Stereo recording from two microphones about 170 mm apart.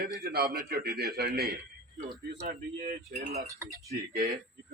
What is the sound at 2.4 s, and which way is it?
Speech, 60° right (ahead or behind).